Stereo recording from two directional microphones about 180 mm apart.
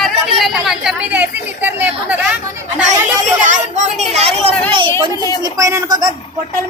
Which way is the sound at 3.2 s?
45° right (ahead or behind).